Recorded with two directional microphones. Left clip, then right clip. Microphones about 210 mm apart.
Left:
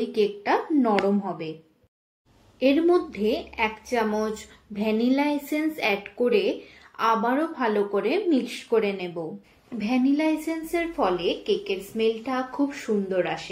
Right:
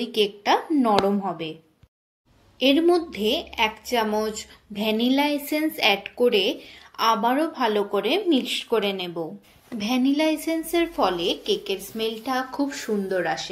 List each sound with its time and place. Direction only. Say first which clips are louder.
0.0 s a woman's voice: right 1 dB; 35° right (ahead or behind)
2.6 s a woman's voice: right 1 dB; 35° right (ahead or behind)